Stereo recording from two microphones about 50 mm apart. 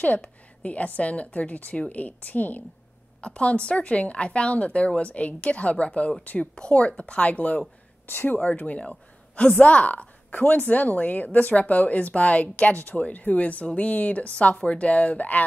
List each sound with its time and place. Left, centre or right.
0.0 s a woman's voice: left
3.2 s a woman's voice: left
8.1 s speech: left
8.5 s a woman's voice: left